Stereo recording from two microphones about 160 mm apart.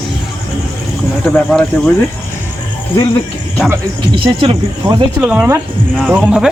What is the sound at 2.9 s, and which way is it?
Speech, 20° left (ahead or behind).